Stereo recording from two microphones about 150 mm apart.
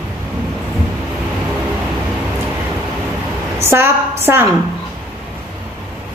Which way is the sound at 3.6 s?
15° right (ahead or behind).